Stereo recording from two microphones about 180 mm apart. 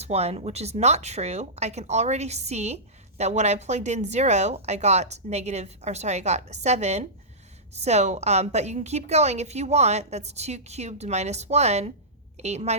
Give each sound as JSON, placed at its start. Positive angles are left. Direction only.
{"t": 0.0, "sound": "speech", "side_deg": -35}